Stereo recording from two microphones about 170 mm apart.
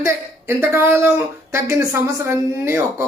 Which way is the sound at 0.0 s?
15° right (ahead or behind).